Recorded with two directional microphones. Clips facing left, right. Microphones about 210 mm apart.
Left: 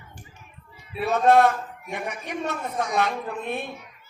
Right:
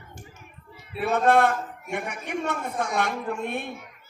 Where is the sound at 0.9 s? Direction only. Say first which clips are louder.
Left 2 dB; 55° right (ahead or behind).